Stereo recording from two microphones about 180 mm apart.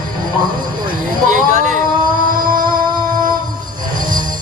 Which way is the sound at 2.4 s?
50° right (ahead or behind).